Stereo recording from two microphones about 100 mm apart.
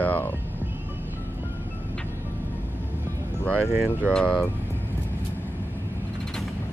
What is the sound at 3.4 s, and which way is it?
Speech, 15° left (ahead or behind).